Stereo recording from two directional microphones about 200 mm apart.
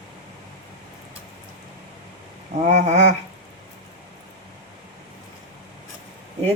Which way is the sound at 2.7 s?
35° right (ahead or behind).